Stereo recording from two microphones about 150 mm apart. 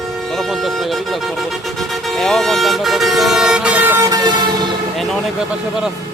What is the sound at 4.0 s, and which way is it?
Speech, 25° right (ahead or behind).